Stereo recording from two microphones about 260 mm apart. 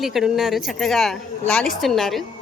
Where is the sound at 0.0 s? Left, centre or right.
Centre.